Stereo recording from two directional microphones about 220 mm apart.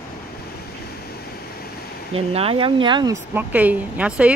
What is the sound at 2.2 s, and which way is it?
Speech, 25° right (ahead or behind).